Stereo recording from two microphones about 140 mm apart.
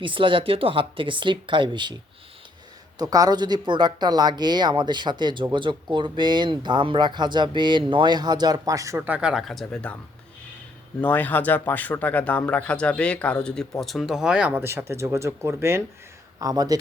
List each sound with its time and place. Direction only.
0.0 s speech: 35° right (ahead or behind)
3.0 s speech: 25° right (ahead or behind)
9.0 s speech: 10° right (ahead or behind); by 10.0 s 5° left (ahead or behind)
11.0 s speech: 10° left (ahead or behind); by 16.7 s 25° right (ahead or behind)